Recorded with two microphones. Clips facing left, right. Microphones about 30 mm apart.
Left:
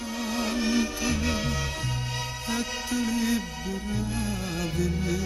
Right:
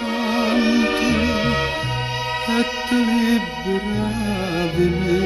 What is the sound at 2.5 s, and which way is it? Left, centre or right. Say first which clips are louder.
Music: right 9 dB; right.